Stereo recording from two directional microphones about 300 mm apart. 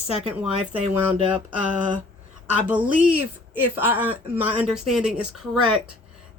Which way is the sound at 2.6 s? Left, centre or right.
Centre.